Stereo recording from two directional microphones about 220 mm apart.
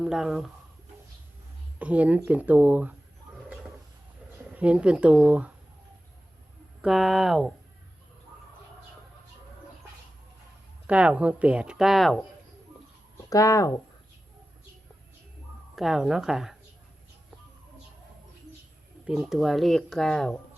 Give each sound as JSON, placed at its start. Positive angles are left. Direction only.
{"t": 0.0, "sound": "speech", "side_deg": 0}
{"t": 1.8, "sound": "speech", "side_deg": -5}
{"t": 4.5, "sound": "speech", "side_deg": -5}
{"t": 6.8, "sound": "speech", "side_deg": 0}
{"t": 10.8, "sound": "speech", "side_deg": -5}
{"t": 13.3, "sound": "speech", "side_deg": 15}
{"t": 15.7, "sound": "speech", "side_deg": 0}
{"t": 19.0, "sound": "speech", "side_deg": -5}